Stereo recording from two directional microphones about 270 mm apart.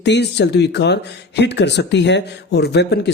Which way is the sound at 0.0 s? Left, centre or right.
Left.